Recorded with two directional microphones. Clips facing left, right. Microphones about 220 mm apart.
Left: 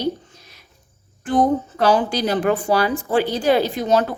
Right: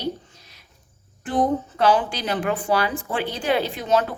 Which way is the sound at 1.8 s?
40° left (ahead or behind).